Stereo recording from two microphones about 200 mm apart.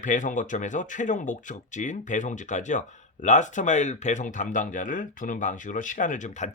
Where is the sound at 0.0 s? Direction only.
40° left (ahead or behind).